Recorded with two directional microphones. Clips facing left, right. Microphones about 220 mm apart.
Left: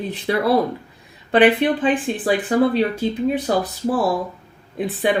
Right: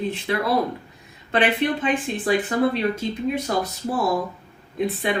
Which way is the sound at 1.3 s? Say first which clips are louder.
Left 6 dB; 30° left (ahead or behind).